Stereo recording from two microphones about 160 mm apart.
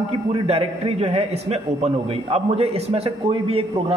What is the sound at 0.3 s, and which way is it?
A man's voice, 35° right (ahead or behind).